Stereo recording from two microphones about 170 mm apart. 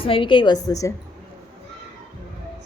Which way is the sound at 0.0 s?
30° left (ahead or behind).